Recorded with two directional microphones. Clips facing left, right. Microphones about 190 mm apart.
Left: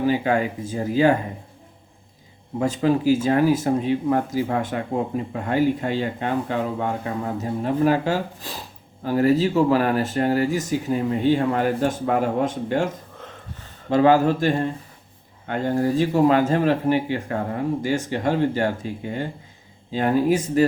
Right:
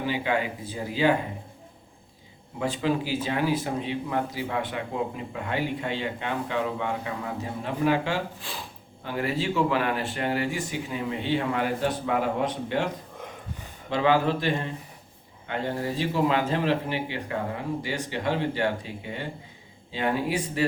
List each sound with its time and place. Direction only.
0.0 s speech: 45° left (ahead or behind)
2.6 s speech: 45° left (ahead or behind)
13.1 s a sound: 15° right (ahead or behind)
13.9 s speech: 45° left (ahead or behind)